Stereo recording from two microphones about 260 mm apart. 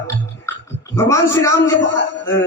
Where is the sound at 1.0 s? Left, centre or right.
Centre.